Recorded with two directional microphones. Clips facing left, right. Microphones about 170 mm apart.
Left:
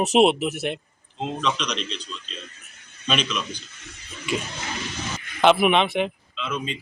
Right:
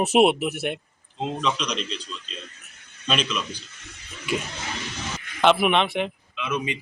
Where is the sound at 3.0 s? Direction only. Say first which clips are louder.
Even; centre (ahead or behind).